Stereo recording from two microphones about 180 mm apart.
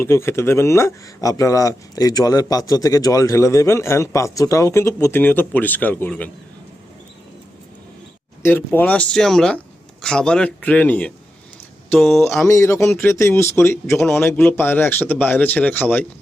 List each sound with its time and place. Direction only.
0.0 s speech: 15° left (ahead or behind)
8.4 s speech: 10° left (ahead or behind)
12.5 s speech: 15° left (ahead or behind)